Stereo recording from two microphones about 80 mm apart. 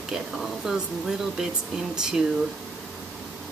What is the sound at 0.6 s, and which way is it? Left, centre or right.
Speech, centre.